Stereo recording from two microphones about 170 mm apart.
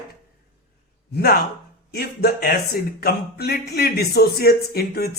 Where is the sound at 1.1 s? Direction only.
65° left (ahead or behind).